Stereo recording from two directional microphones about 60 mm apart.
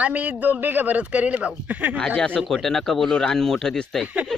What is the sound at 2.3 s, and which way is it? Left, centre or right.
Speech, centre.